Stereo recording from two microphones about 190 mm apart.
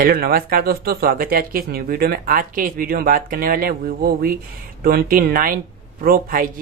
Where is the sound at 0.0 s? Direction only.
50° right (ahead or behind).